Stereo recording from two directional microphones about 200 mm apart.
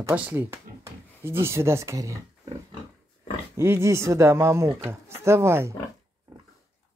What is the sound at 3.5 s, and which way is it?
Speech, 15° right (ahead or behind).